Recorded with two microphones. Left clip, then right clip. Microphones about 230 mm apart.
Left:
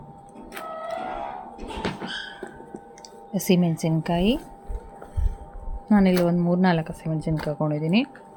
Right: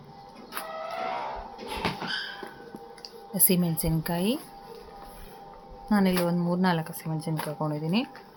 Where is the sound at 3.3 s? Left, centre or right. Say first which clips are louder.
Left 5 dB; centre.